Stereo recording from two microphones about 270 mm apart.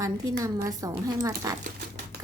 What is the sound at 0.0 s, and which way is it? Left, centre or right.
A woman's voice, centre.